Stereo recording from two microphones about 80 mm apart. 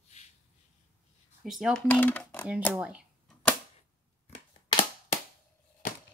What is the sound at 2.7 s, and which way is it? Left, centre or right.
Speech, centre.